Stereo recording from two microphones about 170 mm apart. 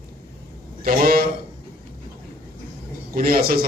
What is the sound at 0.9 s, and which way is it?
Speech, 60° right (ahead or behind).